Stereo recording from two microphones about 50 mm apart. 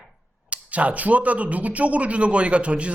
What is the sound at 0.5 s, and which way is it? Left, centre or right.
Speech, right.